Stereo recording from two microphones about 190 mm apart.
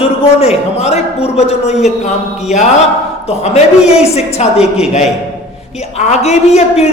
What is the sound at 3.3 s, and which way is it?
A woman's voice, 35° left (ahead or behind).